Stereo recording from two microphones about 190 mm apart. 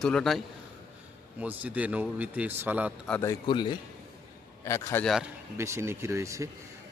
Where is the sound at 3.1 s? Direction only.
15° left (ahead or behind).